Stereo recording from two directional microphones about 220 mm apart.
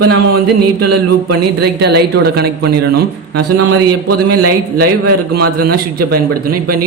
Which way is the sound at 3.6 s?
90° right.